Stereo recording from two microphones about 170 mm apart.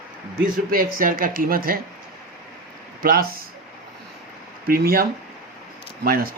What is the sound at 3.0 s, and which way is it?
Speech, 60° right (ahead or behind).